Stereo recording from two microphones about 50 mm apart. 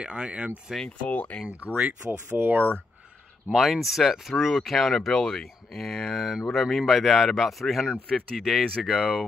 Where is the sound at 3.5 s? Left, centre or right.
Centre.